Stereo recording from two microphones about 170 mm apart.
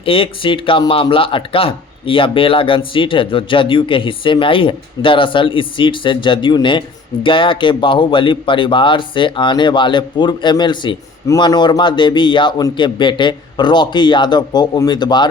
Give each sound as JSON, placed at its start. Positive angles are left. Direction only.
{"t": 0.0, "sound": "speech", "side_deg": 30}